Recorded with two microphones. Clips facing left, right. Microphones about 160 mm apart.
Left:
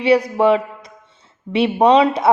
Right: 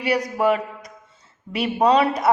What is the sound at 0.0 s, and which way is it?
Speech, 25° left (ahead or behind).